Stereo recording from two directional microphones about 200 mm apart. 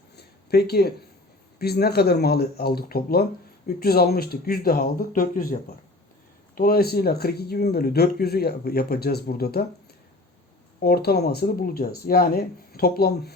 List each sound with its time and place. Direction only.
0.2 s a sound: 50° left (ahead or behind)
1.5 s speech: 50° left (ahead or behind)
6.6 s speech: 50° left (ahead or behind)
10.8 s speech: 50° left (ahead or behind)